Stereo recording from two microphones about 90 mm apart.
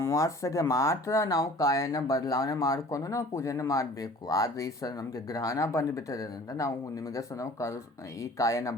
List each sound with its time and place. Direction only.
0.0 s speech: 35° left (ahead or behind)